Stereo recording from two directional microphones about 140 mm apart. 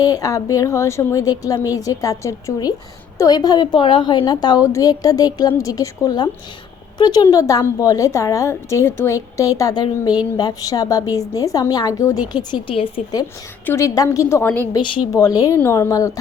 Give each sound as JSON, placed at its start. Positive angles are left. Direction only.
{"t": 0.0, "sound": "a woman's voice", "side_deg": 25}
{"t": 14.7, "sound": "a woman's voice", "side_deg": 30}